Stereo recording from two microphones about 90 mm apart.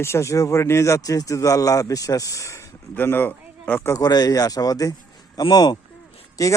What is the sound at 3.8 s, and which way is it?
Speech, 40° left (ahead or behind).